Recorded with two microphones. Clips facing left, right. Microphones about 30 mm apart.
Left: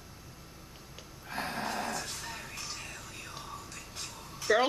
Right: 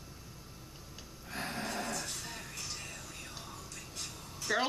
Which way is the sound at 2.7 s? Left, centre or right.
Centre.